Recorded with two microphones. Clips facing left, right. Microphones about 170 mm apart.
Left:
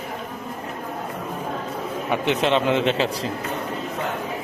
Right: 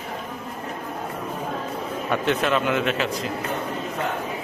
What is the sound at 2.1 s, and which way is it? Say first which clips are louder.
A man's voice: left 1 dB; 20° left (ahead or behind).